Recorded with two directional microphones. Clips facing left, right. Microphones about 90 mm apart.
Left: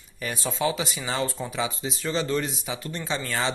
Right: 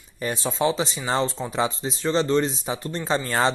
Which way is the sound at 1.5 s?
35° right (ahead or behind).